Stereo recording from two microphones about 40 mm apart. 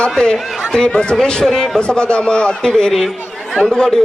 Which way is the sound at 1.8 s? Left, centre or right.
Left.